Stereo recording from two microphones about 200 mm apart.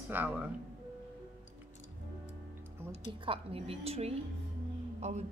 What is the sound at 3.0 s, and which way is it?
Speech, 25° right (ahead or behind).